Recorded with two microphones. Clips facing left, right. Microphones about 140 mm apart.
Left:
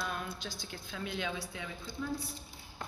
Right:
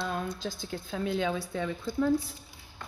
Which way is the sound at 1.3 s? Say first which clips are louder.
Right 9 dB; 60° right (ahead or behind).